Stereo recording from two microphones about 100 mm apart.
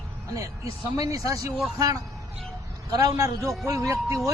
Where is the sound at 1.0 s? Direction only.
35° right (ahead or behind).